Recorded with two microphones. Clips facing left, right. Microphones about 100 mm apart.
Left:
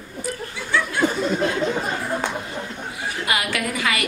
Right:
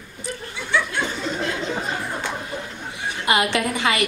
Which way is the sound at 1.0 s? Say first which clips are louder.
Left 8 dB; 45° left (ahead or behind).